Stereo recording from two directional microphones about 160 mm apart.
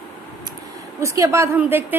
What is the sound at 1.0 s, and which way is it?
Speech, 20° right (ahead or behind).